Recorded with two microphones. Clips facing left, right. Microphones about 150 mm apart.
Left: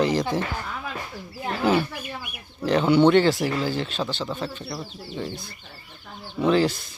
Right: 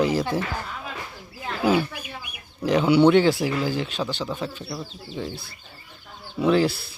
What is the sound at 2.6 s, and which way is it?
Speech, 10° right (ahead or behind).